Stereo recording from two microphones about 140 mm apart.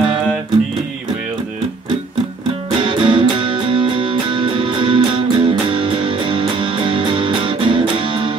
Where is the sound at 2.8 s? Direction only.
35° right (ahead or behind).